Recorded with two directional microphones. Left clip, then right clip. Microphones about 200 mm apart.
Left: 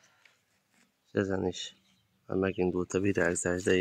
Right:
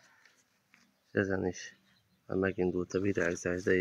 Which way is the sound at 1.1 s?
10° left (ahead or behind).